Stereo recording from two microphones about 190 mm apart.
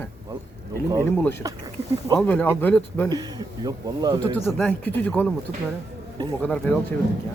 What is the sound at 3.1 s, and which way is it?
Speech, 20° right (ahead or behind).